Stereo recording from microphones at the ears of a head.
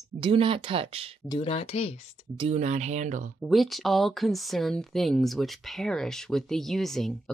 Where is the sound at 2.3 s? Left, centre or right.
Right.